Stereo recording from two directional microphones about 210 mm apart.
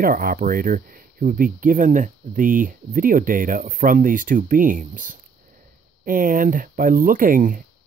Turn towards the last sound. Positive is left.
turn(degrees=-40)  # may be behind; listen again after turning